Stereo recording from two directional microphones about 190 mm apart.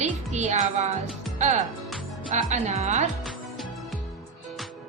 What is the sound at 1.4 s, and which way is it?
Speech, 35° right (ahead or behind).